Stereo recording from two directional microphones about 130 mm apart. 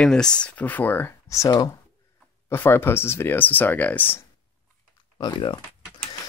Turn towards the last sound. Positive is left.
turn(degrees=35)  # may be behind; listen again after turning